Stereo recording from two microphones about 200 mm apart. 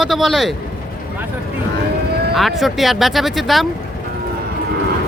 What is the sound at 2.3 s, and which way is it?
Speech, centre (ahead or behind).